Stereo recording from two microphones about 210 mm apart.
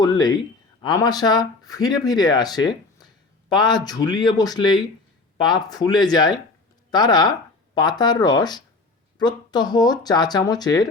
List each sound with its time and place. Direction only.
0.0 s speech: 20° left (ahead or behind)